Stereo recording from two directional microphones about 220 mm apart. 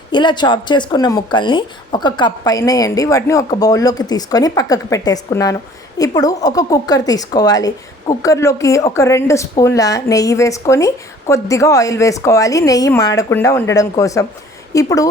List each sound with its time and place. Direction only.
0.1 s speech: 20° left (ahead or behind)